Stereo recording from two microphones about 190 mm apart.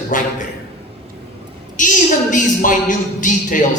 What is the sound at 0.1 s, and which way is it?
Speech, 45° left (ahead or behind).